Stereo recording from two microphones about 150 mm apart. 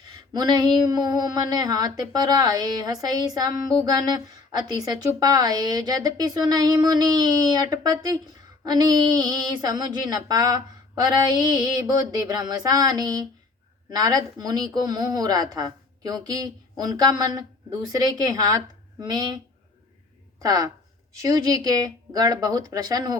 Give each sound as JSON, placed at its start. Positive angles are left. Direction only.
{"t": 0.3, "sound": "a woman's voice", "side_deg": -25}
{"t": 20.4, "sound": "a woman's voice", "side_deg": -25}